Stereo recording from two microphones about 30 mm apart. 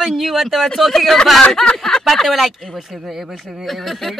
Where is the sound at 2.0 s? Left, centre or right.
Centre.